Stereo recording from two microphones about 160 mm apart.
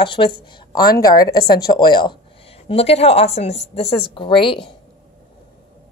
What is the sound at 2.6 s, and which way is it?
A woman's voice, 40° left (ahead or behind).